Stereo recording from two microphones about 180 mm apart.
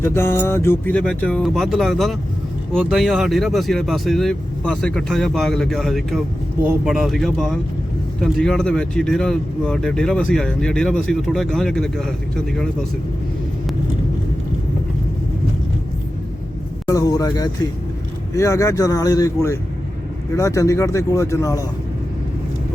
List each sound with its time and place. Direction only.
0.0 s speech: 15° left (ahead or behind)
16.8 s speech: 20° left (ahead or behind)